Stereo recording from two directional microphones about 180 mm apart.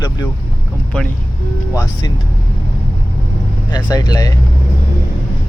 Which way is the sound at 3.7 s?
20° left (ahead or behind).